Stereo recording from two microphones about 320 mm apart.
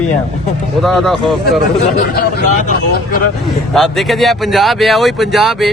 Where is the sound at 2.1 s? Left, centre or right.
Left.